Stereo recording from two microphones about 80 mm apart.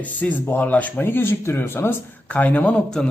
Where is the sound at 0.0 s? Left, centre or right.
Left.